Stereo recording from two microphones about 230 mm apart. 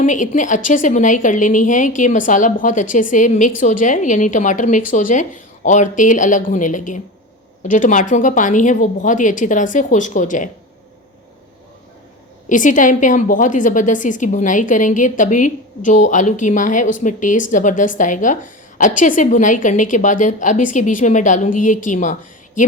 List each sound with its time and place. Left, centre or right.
0.0 s a woman's voice: left
12.5 s a woman's voice: left